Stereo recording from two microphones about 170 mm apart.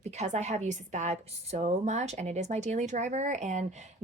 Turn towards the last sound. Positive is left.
turn(degrees=-45)  # may be behind; listen again after turning